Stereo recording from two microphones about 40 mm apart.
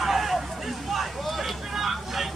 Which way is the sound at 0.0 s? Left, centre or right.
Centre.